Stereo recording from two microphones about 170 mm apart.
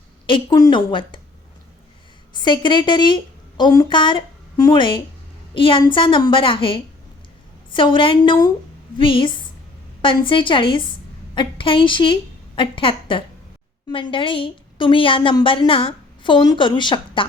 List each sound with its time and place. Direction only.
0.3 s a woman's voice: 25° left (ahead or behind)
2.3 s a woman's voice: 25° left (ahead or behind)